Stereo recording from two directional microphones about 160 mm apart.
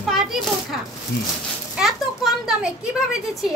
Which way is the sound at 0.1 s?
Centre (ahead or behind).